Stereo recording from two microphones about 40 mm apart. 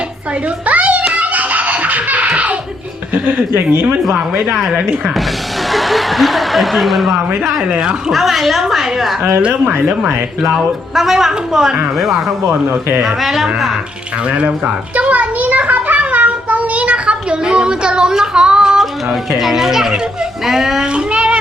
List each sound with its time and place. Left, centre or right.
0.6 s a sound: right
3.5 s speech: right
4.1 s speech: right
5.7 s a woman's voice: centre
9.4 s speech: right
10.4 s speech: centre
14.3 s speech: right
14.9 s child singing: right; by 18.8 s centre
19.3 s speech: centre
20.9 s child singing: right